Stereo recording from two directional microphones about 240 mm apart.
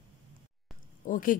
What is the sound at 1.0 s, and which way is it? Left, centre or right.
Speech, left.